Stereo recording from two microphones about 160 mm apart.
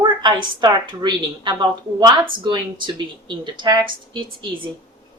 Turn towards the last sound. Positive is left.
turn(degrees=-30)  # may be behind; listen again after turning